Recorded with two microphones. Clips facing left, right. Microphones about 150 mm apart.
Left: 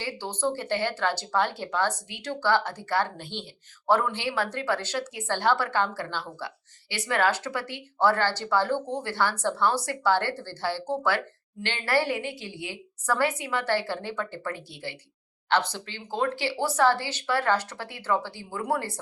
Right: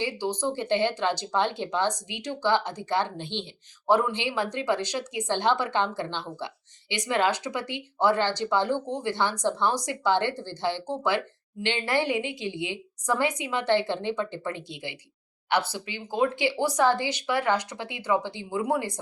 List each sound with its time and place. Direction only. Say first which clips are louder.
0.0 s speech: right 2 dB; 15° right (ahead or behind)